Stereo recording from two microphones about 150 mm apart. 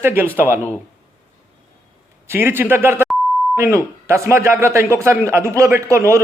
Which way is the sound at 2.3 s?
15° right (ahead or behind).